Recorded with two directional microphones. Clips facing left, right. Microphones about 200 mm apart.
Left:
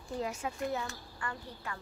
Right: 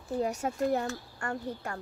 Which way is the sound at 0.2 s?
40° right (ahead or behind).